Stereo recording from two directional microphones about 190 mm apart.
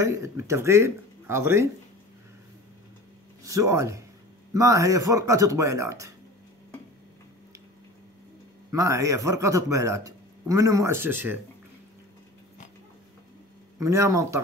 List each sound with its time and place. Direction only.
0.0 s speech: 15° right (ahead or behind)
3.4 s speech: 15° right (ahead or behind)
8.7 s speech: 15° right (ahead or behind)
13.7 s speech: 15° right (ahead or behind)